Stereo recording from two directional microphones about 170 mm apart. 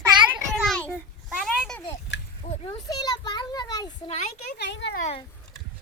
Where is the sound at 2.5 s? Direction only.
35° left (ahead or behind).